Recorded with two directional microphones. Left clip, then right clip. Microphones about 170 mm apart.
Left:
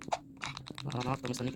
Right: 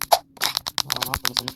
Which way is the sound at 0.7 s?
65° right (ahead or behind).